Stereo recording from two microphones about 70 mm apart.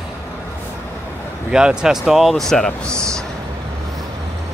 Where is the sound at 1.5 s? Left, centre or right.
Centre.